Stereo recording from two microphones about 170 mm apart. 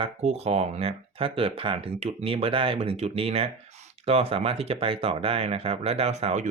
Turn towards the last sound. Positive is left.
turn(degrees=-45)  # may be behind; listen again after turning